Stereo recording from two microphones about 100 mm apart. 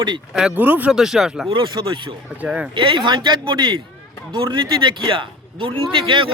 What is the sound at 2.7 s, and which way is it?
Speech, 55° right (ahead or behind).